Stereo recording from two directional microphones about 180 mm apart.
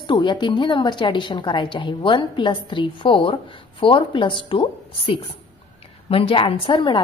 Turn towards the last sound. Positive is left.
turn(degrees=30)  # may be behind; listen again after turning